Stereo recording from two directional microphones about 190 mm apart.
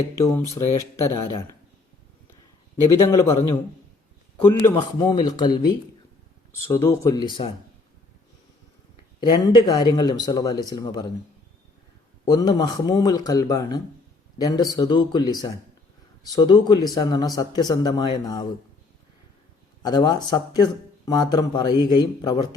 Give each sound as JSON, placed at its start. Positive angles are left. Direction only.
{"t": 0.2, "sound": "speech", "side_deg": 15}
{"t": 1.1, "sound": "speech", "side_deg": 25}
{"t": 2.8, "sound": "speech", "side_deg": 20}
{"t": 4.4, "sound": "speech", "side_deg": 20}
{"t": 9.2, "sound": "speech", "side_deg": 25}
{"t": 12.2, "sound": "speech", "side_deg": 20}
{"t": 19.8, "sound": "speech", "side_deg": 20}